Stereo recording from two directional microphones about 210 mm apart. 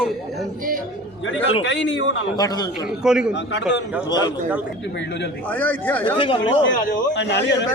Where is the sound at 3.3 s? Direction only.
55° left (ahead or behind).